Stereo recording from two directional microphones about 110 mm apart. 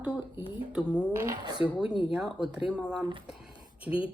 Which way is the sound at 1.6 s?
55° left (ahead or behind).